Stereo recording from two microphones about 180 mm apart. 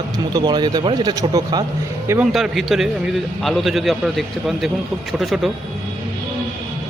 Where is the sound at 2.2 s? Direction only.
Centre (ahead or behind).